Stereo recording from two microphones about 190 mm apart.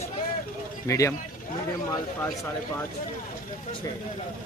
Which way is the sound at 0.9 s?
15° left (ahead or behind).